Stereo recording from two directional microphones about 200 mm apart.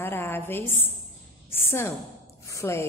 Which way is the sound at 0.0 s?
10° left (ahead or behind).